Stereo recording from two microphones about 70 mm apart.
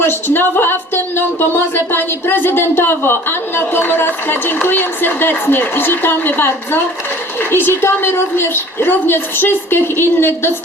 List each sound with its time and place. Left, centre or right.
0.3 s a woman's voice: left